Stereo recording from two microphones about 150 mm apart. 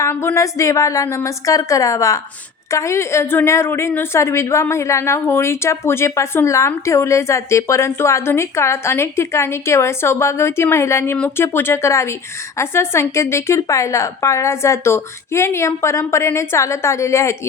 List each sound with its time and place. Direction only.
0.0 s a woman's voice: 15° left (ahead or behind)